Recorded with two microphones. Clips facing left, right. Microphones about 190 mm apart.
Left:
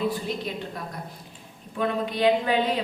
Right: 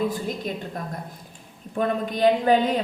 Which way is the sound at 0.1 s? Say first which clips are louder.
Right 1 dB; 45° right (ahead or behind).